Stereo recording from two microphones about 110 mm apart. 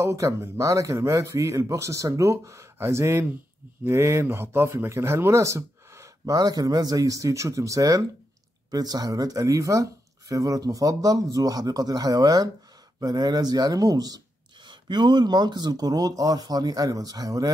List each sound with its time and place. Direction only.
0.0 s speech: 25° right (ahead or behind)